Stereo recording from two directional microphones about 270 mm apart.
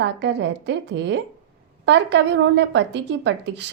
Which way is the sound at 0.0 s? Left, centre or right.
Right.